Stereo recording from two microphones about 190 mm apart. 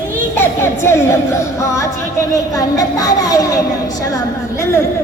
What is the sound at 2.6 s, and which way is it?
A child's voice, 20° left (ahead or behind).